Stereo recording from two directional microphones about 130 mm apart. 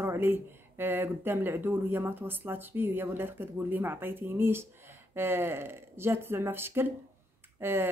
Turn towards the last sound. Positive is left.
turn(degrees=-15)  # may be behind; listen again after turning